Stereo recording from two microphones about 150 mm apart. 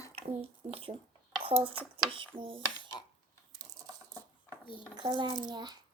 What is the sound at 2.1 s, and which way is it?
Speech, 35° right (ahead or behind).